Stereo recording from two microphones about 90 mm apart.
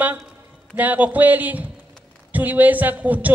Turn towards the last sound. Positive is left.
turn(degrees=-15)  # may be behind; listen again after turning